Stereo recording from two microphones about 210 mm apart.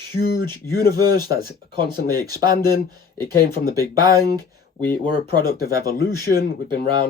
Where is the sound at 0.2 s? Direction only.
50° left (ahead or behind).